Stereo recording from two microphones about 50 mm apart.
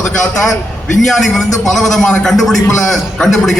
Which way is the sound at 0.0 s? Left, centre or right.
Centre.